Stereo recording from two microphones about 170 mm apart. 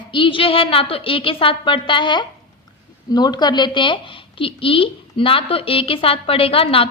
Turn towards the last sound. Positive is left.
turn(degrees=35)  # may be behind; listen again after turning